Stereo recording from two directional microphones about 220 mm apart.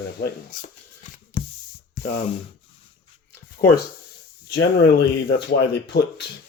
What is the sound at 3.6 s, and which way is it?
Speech, 40° left (ahead or behind).